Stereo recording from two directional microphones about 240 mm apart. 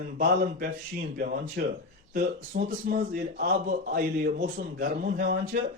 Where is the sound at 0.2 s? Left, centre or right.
Right.